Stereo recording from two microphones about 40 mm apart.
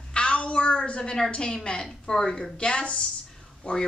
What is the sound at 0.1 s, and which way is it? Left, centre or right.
A woman's voice, left.